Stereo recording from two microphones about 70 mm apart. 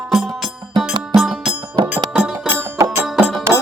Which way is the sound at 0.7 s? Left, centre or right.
Centre.